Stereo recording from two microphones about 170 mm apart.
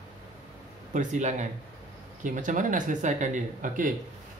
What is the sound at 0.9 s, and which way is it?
Speech, 45° right (ahead or behind).